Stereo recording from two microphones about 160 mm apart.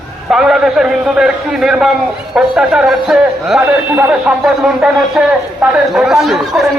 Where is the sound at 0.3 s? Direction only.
5° right (ahead or behind).